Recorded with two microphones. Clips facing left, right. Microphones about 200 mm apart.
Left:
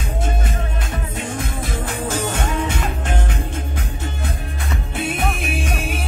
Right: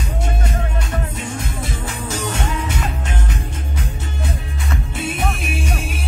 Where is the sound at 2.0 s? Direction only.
55° left (ahead or behind).